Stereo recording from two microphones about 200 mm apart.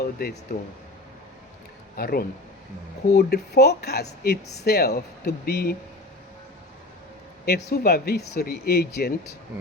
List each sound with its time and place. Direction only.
0.0 s speech: 50° left (ahead or behind)
2.0 s speech: 50° left (ahead or behind)
7.4 s speech: 50° left (ahead or behind)